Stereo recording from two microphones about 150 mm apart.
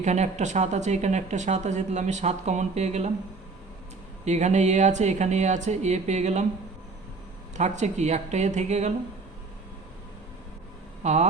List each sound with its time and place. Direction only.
0.0 s speech: 50° right (ahead or behind)
4.3 s speech: 50° right (ahead or behind)
7.5 s speech: 50° right (ahead or behind)
11.0 s speech: 50° right (ahead or behind)